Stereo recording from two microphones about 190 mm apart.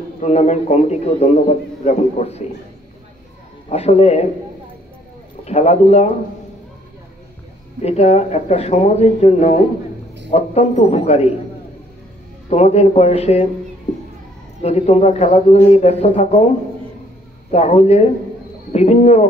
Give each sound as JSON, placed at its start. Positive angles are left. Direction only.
{"t": 0.2, "sound": "a man's voice", "side_deg": 35}
{"t": 3.6, "sound": "a man's voice", "side_deg": 35}
{"t": 5.4, "sound": "a man's voice", "side_deg": 35}
{"t": 7.8, "sound": "a man's voice", "side_deg": 35}
{"t": 12.4, "sound": "a man's voice", "side_deg": 35}
{"t": 14.6, "sound": "a man's voice", "side_deg": 35}
{"t": 17.5, "sound": "a man's voice", "side_deg": 35}